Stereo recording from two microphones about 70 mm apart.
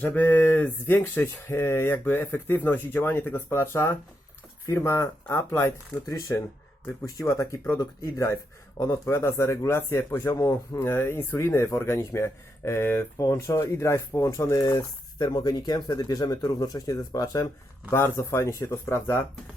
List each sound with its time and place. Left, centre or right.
0.0 s speech: left
4.6 s speech: left
5.3 s speech: left
10.2 s speech: left
13.1 s speech: left
13.6 s speech: left
14.6 s speech: left
15.2 s speech: left
17.9 s speech: left